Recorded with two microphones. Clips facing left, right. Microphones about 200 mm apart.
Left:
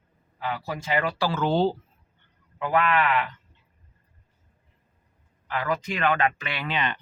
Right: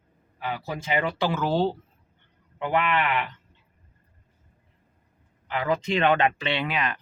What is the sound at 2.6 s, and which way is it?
Speech, 25° right (ahead or behind).